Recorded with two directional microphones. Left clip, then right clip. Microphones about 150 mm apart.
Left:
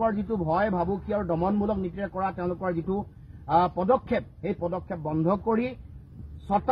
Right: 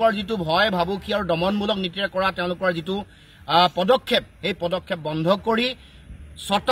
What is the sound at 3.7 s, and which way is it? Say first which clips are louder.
Speech: right 5 dB; 35° right (ahead or behind).